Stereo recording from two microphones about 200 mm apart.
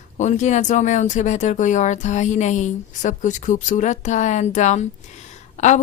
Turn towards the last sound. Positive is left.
turn(degrees=35)  # may be behind; listen again after turning